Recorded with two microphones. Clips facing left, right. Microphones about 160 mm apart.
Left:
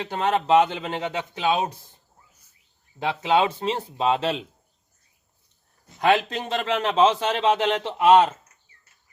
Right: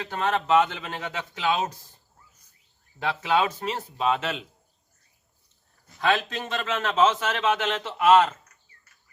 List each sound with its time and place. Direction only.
0.0 s speech: 20° left (ahead or behind)
3.0 s speech: 20° left (ahead or behind)
6.0 s speech: 20° left (ahead or behind)
6.9 s a man's voice: 30° left (ahead or behind)
8.1 s speech: 15° left (ahead or behind)